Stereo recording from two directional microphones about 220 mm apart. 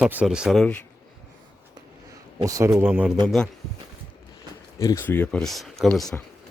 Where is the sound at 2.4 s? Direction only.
15° right (ahead or behind).